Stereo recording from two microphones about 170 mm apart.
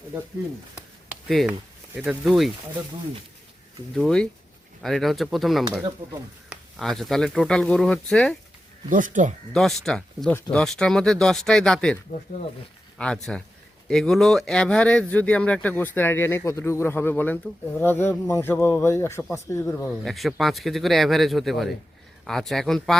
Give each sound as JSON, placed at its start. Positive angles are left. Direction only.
{"t": 1.3, "sound": "speech", "side_deg": 0}
{"t": 3.9, "sound": "speech", "side_deg": 0}
{"t": 6.0, "sound": "speech", "side_deg": -15}
{"t": 6.5, "sound": "speech", "side_deg": 0}
{"t": 8.9, "sound": "speech", "side_deg": -50}
{"t": 9.5, "sound": "speech", "side_deg": 0}
{"t": 13.0, "sound": "speech", "side_deg": 5}